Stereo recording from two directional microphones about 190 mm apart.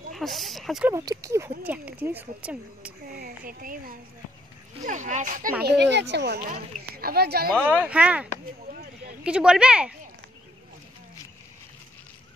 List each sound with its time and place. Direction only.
0.1 s speech: centre (ahead or behind)
0.8 s speech: 15° right (ahead or behind)
3.2 s speech: 50° right (ahead or behind)
5.8 s speech: 65° right (ahead or behind)
7.6 s speech: 5° right (ahead or behind)